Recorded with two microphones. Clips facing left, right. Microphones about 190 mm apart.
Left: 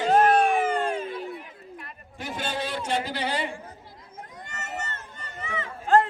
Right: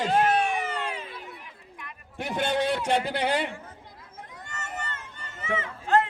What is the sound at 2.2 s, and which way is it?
A man's voice, 60° right (ahead or behind).